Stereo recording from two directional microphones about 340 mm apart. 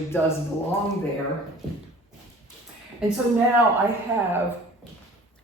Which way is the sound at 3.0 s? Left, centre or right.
Centre.